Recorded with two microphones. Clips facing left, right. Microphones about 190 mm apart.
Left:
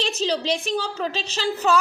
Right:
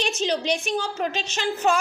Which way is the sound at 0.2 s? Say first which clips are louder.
Left 1 dB; 35° left (ahead or behind).